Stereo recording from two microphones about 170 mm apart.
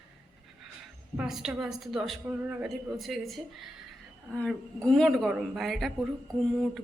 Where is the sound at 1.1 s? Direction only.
5° right (ahead or behind).